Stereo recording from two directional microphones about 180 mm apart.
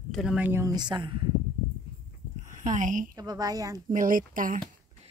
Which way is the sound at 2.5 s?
45° right (ahead or behind).